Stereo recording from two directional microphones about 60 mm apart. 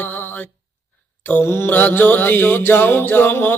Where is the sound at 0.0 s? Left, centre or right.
Left.